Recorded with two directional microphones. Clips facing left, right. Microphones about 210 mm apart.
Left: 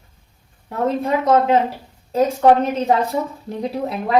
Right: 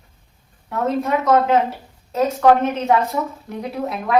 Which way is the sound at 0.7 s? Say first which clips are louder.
Left 1 dB; 30° left (ahead or behind).